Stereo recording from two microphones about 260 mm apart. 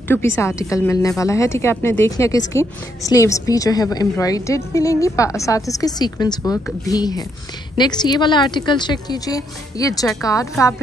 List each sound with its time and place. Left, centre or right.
0.4 s a woman's voice: centre